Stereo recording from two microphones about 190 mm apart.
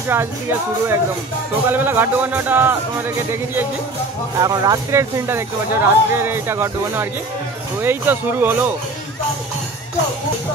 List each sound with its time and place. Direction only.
0.1 s speech: 10° right (ahead or behind)